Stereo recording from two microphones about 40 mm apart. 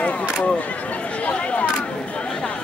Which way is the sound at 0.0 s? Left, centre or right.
Left.